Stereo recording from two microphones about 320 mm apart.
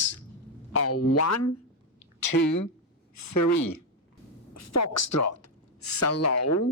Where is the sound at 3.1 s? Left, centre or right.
Left.